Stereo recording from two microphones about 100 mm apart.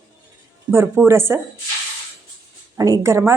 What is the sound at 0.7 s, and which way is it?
Speech, 25° right (ahead or behind).